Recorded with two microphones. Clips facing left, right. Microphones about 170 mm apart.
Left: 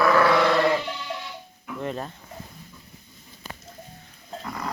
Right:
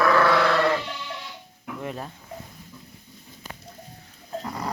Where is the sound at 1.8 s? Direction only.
10° right (ahead or behind).